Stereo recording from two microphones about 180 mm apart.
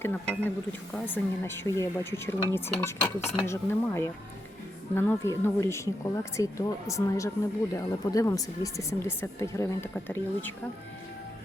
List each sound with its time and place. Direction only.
0.0 s speech: 10° left (ahead or behind)